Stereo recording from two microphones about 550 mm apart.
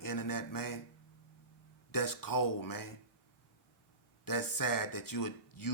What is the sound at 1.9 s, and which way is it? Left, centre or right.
Speech, left.